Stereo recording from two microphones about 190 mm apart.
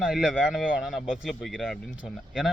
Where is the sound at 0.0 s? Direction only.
5° right (ahead or behind).